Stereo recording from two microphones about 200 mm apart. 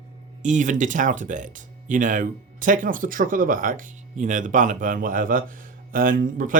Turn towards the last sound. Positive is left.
turn(degrees=-45)  # may be behind; listen again after turning